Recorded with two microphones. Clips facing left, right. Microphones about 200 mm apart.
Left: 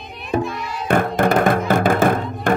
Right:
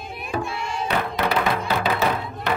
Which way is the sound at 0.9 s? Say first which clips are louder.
Left 8 dB; 50° left (ahead or behind).